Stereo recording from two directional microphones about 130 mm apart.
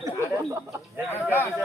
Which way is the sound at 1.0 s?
15° left (ahead or behind).